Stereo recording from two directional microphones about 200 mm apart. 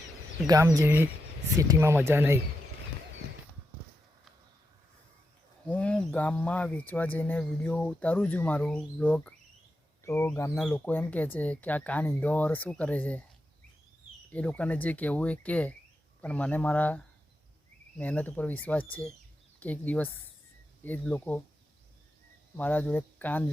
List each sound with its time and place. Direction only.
0.4 s speech: 20° right (ahead or behind)
5.6 s speech: 5° left (ahead or behind)
14.3 s speech: 5° left (ahead or behind)
22.5 s speech: 10° left (ahead or behind)